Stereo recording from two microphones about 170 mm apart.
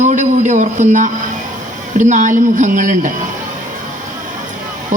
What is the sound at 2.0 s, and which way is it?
A woman's voice, 45° right (ahead or behind).